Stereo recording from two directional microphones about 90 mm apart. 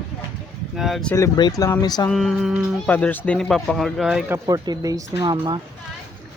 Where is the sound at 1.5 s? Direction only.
40° left (ahead or behind).